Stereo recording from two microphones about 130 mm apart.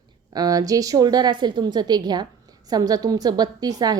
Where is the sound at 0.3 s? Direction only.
30° right (ahead or behind).